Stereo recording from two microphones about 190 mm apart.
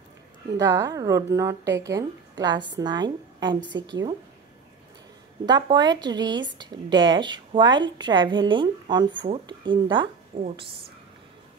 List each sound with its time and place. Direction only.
0.6 s a woman's voice: 15° right (ahead or behind)
5.5 s a woman's voice: 20° right (ahead or behind)